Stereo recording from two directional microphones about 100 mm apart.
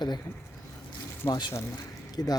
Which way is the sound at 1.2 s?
20° left (ahead or behind).